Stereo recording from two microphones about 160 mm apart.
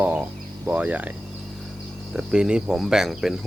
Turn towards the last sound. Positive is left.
turn(degrees=0)  # may be behind; listen again after turning